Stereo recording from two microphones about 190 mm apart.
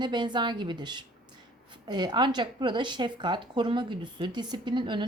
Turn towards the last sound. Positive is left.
turn(degrees=-25)  # may be behind; listen again after turning